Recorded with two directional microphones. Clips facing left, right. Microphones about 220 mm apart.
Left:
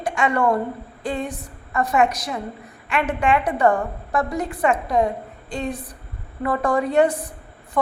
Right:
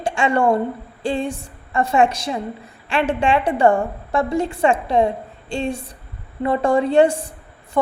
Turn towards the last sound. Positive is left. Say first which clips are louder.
# right 3 dB
turn(degrees=-30)  # may be behind; listen again after turning